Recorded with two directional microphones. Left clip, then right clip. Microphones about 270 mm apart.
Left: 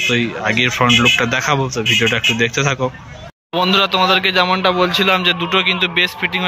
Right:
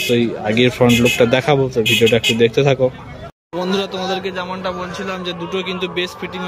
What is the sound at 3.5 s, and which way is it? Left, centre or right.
Speech, centre.